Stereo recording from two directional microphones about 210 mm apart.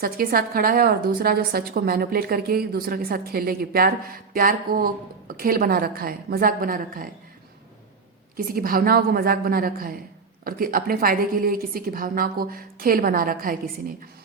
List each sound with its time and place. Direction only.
0.0 s a woman's voice: 45° right (ahead or behind)
8.4 s a woman's voice: 45° right (ahead or behind)